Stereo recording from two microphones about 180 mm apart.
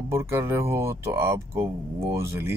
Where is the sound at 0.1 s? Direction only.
15° right (ahead or behind).